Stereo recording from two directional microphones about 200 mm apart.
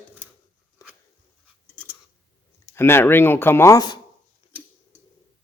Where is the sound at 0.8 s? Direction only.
15° left (ahead or behind).